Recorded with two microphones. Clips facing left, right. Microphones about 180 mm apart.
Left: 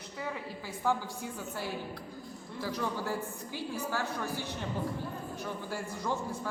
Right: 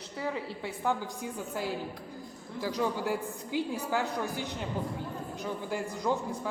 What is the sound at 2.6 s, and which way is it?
A woman's voice, 15° right (ahead or behind).